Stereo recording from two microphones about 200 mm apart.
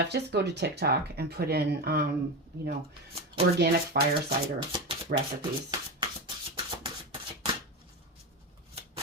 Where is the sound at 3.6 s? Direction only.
55° right (ahead or behind).